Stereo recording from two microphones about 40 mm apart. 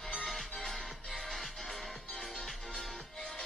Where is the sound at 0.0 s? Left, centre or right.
Centre.